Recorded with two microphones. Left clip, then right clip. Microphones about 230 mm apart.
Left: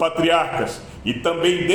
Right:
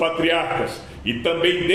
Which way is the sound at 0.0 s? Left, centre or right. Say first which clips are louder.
Left 2 dB; left.